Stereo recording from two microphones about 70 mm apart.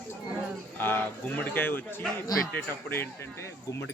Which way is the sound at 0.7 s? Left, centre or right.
Left.